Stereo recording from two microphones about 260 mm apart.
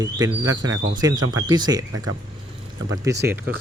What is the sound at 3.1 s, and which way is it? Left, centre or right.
Speech, centre.